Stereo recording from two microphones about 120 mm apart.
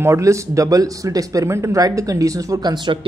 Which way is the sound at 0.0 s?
25° right (ahead or behind).